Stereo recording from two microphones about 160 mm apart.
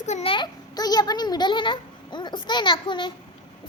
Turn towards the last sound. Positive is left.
turn(degrees=30)  # may be behind; listen again after turning